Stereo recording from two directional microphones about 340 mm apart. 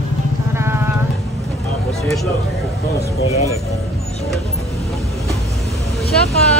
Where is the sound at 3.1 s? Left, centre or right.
Centre.